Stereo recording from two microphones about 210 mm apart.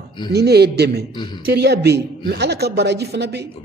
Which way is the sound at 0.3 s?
50° right (ahead or behind).